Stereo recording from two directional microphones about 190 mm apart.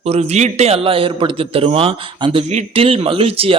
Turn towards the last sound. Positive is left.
turn(degrees=-30)  # may be behind; listen again after turning